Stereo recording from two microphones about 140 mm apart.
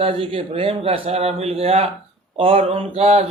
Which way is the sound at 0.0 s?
40° right (ahead or behind).